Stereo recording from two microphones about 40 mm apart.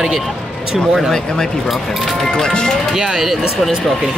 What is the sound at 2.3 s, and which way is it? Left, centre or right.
Speech, left.